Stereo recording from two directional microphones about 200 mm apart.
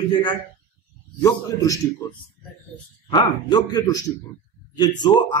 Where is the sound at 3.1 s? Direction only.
20° left (ahead or behind).